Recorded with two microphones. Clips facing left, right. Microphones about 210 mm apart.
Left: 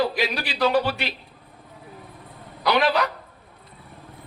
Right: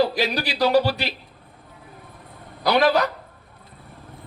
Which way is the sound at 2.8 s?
40° right (ahead or behind).